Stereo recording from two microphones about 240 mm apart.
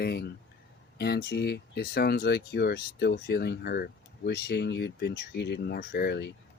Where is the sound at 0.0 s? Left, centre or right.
Left.